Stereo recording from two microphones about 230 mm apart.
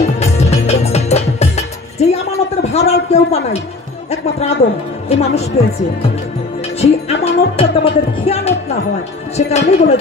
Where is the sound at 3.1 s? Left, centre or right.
Left.